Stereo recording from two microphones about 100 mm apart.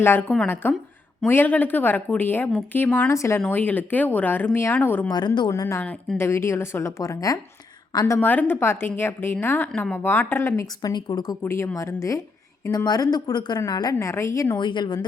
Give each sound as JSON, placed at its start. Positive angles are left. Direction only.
{"t": 0.0, "sound": "a woman's voice", "side_deg": 20}
{"t": 3.1, "sound": "a woman's voice", "side_deg": 30}
{"t": 3.4, "sound": "a woman's voice", "side_deg": 15}
{"t": 5.0, "sound": "a woman's voice", "side_deg": 45}
{"t": 5.5, "sound": "a woman's voice", "side_deg": 30}
{"t": 5.8, "sound": "speech", "side_deg": 15}
{"t": 6.1, "sound": "a woman's voice", "side_deg": 25}
{"t": 8.2, "sound": "a woman's voice", "side_deg": 20}
{"t": 10.8, "sound": "speech", "side_deg": 40}
{"t": 11.4, "sound": "speech", "side_deg": 25}
{"t": 14.0, "sound": "speech", "side_deg": 30}
{"t": 14.6, "sound": "a woman's voice", "side_deg": 50}